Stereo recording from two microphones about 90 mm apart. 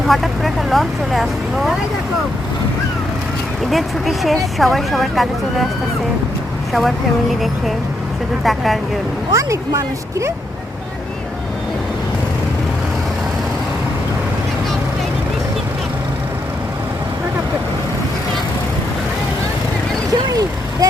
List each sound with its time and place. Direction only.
0.1 s speech: centre (ahead or behind)
3.7 s speech: centre (ahead or behind)
6.7 s speech: centre (ahead or behind)
9.3 s speech: 35° right (ahead or behind)